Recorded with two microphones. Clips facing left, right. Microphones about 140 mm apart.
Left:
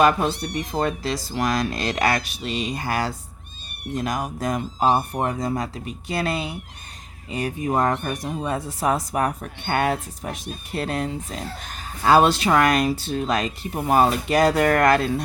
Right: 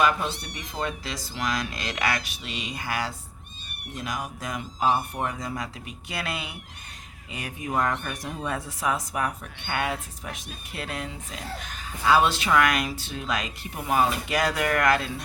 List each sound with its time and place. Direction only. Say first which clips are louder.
0.0 s speech: left 6 dB; 40° left (ahead or behind)
8.1 s speech: left 5 dB; 20° left (ahead or behind); by 15.1 s 40° left (ahead or behind)